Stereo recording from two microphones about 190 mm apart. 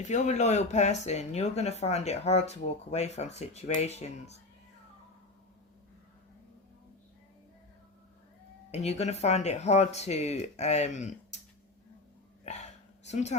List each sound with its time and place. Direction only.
0.0 s speech: 40° left (ahead or behind)
8.7 s speech: 35° left (ahead or behind)
12.5 s a sound: 35° left (ahead or behind)
13.1 s speech: 35° left (ahead or behind)